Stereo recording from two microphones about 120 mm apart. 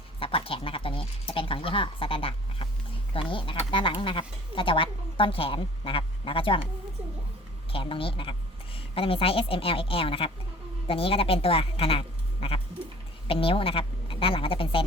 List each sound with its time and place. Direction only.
0.2 s a woman's voice: 50° left (ahead or behind)
7.7 s a woman's voice: 50° left (ahead or behind)